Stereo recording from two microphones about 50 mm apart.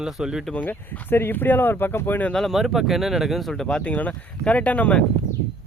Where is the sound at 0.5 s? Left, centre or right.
Left.